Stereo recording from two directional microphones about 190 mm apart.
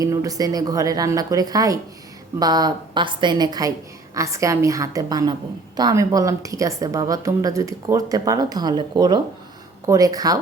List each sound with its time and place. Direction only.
0.0 s a woman's voice: 20° right (ahead or behind)